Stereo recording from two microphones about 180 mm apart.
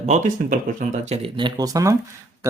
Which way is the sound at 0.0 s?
40° right (ahead or behind).